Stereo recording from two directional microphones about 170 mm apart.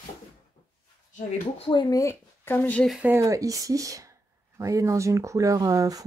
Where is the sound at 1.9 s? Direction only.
15° left (ahead or behind).